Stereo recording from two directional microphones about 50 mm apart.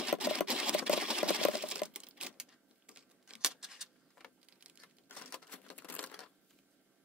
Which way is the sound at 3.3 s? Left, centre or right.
Centre.